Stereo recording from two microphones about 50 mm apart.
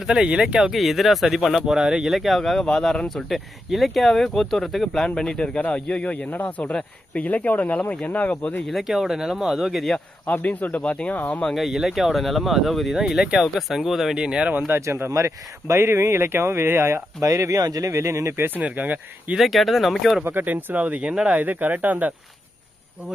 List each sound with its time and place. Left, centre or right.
0.0 s speech: centre
0.7 s speech: centre; by 8.5 s left
8.8 s speech: centre
10.2 s speech: left
11.5 s speech: centre
14.2 s speech: centre
14.8 s speech: right
18.3 s speech: right
18.6 s speech: right
19.4 s speech: centre
20.2 s speech: right
20.8 s speech: right
21.4 s speech: right